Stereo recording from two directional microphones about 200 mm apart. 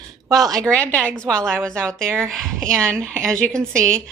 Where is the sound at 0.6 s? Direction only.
5° left (ahead or behind).